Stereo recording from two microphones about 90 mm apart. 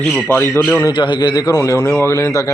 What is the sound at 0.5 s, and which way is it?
Speech, 25° left (ahead or behind).